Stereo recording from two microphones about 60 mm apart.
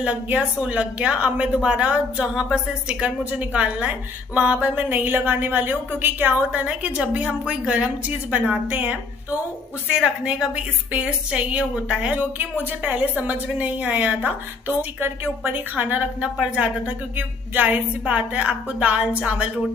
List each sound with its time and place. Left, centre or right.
0.0 s a woman's voice: right
4.8 s a woman's voice: right
6.6 s a woman's voice: centre
9.9 s a woman's voice: centre